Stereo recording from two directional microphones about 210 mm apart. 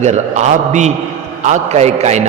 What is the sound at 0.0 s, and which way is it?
A man's voice, 35° right (ahead or behind).